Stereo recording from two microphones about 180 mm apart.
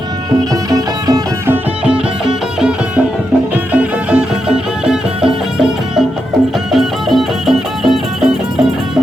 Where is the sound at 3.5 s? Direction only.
10° right (ahead or behind).